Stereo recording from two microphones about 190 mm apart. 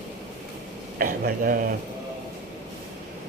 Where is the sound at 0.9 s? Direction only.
50° right (ahead or behind).